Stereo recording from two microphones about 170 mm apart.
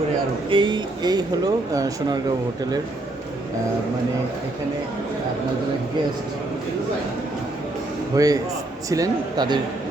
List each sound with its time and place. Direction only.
0.5 s speech: 30° right (ahead or behind)
8.1 s speech: 20° right (ahead or behind)